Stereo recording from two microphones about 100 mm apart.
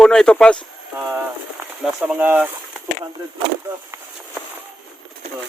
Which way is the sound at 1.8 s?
10° right (ahead or behind).